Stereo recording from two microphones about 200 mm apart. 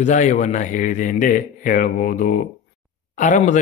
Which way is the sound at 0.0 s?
35° left (ahead or behind).